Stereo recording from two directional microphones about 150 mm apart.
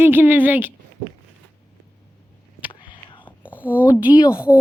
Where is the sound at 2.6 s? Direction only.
35° left (ahead or behind).